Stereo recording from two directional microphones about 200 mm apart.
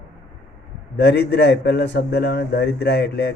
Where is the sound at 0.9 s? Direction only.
60° left (ahead or behind).